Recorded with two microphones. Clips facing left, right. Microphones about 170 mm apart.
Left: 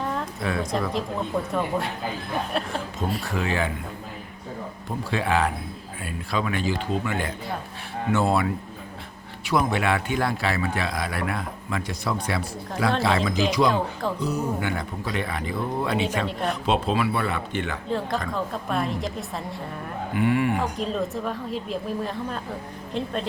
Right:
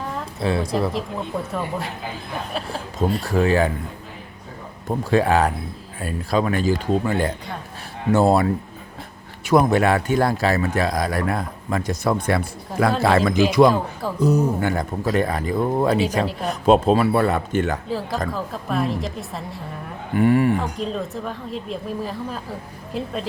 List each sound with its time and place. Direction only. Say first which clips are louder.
0.3 s speech: right 5 dB; 30° right (ahead or behind)
0.7 s speech: right 3 dB; 5° right (ahead or behind)
3.2 s speech: right 10 dB; 40° right (ahead or behind)
4.9 s speech: right 7 dB; 40° right (ahead or behind)
17.8 s speech: right 2 dB; 5° right (ahead or behind)
20.1 s speech: right 5 dB; 40° right (ahead or behind)
20.6 s speech: even; centre (ahead or behind)